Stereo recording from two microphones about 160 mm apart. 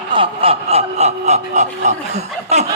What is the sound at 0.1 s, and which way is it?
Speech, 35° right (ahead or behind).